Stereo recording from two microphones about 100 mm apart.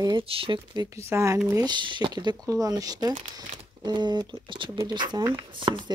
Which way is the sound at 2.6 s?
40° right (ahead or behind).